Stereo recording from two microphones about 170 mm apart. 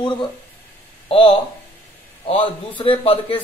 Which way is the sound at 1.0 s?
30° left (ahead or behind).